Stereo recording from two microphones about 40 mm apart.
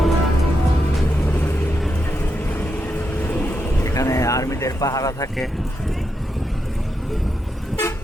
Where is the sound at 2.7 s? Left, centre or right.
Left.